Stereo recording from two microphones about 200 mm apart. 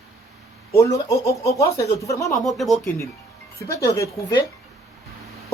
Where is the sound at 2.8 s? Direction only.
15° left (ahead or behind).